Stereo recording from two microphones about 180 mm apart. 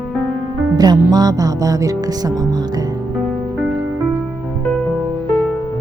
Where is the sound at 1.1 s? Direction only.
20° right (ahead or behind).